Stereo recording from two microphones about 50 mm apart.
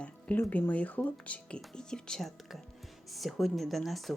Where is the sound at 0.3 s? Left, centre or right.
Left; by 2.3 s centre.